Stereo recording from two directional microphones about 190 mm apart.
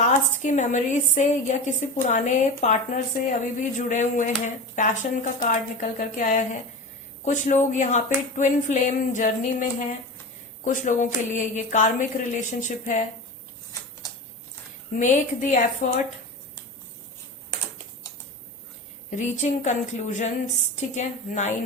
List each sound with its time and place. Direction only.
0.0 s a woman's voice: 40° left (ahead or behind)
14.9 s a woman's voice: 40° left (ahead or behind)
19.1 s a woman's voice: 40° left (ahead or behind)